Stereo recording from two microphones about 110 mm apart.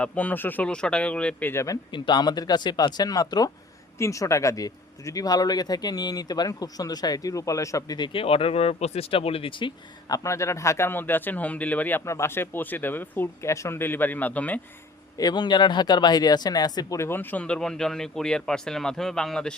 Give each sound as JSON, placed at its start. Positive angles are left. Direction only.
{"t": 0.0, "sound": "speech", "side_deg": 15}
{"t": 1.9, "sound": "speech", "side_deg": 40}
{"t": 10.1, "sound": "speech", "side_deg": 25}
{"t": 15.2, "sound": "speech", "side_deg": 40}
{"t": 17.1, "sound": "speech", "side_deg": 15}